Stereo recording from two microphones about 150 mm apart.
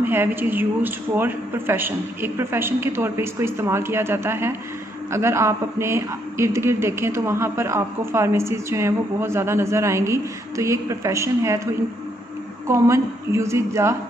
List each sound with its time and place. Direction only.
0.0 s a woman's voice: 15° right (ahead or behind)